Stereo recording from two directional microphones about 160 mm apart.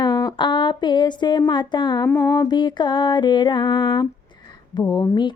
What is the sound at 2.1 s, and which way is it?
Music, 15° left (ahead or behind).